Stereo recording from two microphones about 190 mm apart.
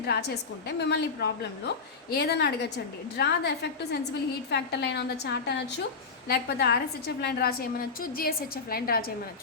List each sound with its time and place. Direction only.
0.0 s a woman's voice: 60° left (ahead or behind)